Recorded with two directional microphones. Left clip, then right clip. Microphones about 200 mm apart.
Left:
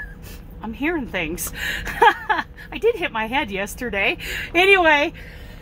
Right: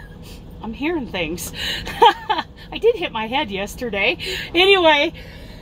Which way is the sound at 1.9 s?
10° left (ahead or behind).